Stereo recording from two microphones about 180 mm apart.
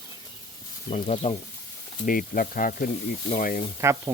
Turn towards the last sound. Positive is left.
turn(degrees=-15)  # may be behind; listen again after turning